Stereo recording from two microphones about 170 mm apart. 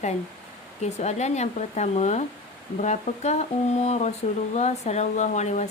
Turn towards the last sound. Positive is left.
turn(degrees=45)  # may be behind; listen again after turning